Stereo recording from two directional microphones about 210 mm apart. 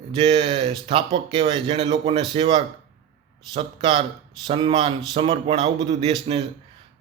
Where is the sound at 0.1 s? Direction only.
25° right (ahead or behind).